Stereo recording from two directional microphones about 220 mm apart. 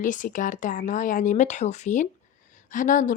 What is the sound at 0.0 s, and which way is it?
Speech, 35° left (ahead or behind).